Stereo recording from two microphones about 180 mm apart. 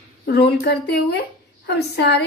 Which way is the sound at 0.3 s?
65° left (ahead or behind).